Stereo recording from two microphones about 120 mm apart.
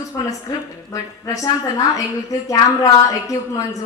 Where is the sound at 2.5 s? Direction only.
30° left (ahead or behind).